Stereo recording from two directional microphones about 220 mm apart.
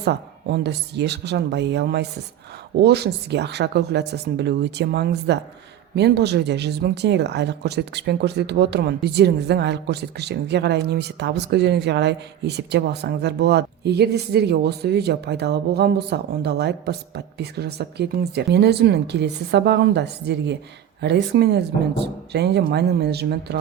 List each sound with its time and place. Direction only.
0.0 s speech: 50° right (ahead or behind)